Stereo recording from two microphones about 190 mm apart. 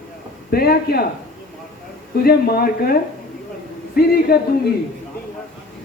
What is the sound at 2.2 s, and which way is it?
Speech, 55° left (ahead or behind).